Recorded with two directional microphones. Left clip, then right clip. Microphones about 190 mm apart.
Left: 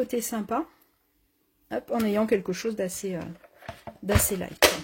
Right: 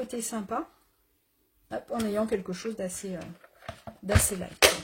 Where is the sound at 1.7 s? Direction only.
45° left (ahead or behind).